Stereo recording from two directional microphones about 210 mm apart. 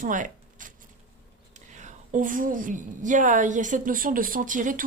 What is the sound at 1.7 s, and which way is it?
A woman's voice, 35° right (ahead or behind).